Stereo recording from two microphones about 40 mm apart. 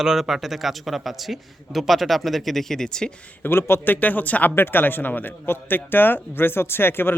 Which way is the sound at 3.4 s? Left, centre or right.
Left.